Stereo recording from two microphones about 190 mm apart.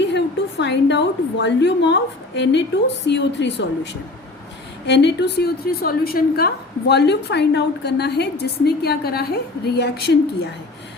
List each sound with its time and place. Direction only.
0.0 s a woman's voice: 65° left (ahead or behind)
4.9 s a woman's voice: 65° left (ahead or behind)
5.8 s a woman's voice: 50° left (ahead or behind)